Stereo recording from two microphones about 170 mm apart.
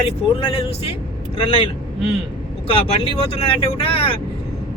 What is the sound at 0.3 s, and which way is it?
Speech, 35° left (ahead or behind).